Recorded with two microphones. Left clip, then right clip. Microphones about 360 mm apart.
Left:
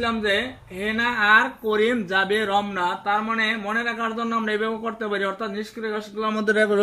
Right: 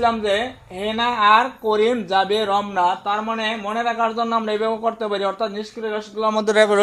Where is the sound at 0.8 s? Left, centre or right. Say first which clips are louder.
Right 3 dB; centre.